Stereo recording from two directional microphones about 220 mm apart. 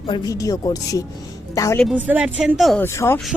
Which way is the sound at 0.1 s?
15° left (ahead or behind).